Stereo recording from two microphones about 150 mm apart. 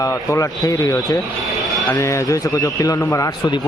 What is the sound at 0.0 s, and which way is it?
A man's voice, 20° left (ahead or behind).